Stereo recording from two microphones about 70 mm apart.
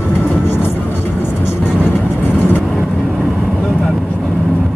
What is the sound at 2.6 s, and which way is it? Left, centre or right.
Vehicle, centre.